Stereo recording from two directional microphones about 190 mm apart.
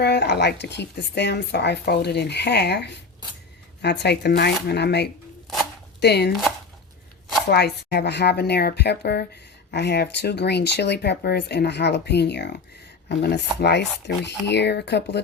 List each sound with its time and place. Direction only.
0.0 s speech: 60° left (ahead or behind)
7.5 s speech: 60° left (ahead or behind)